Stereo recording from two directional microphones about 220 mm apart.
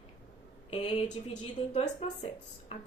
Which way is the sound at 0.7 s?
25° left (ahead or behind).